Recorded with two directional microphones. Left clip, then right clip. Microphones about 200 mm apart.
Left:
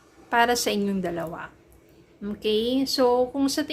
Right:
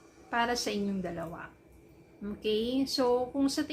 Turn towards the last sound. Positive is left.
turn(degrees=30)  # may be behind; listen again after turning